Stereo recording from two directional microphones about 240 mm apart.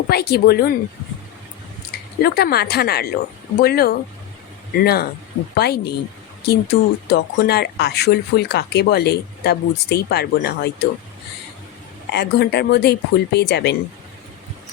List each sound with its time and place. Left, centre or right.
0.1 s a woman's voice: left
2.2 s a woman's voice: left
12.1 s speech: left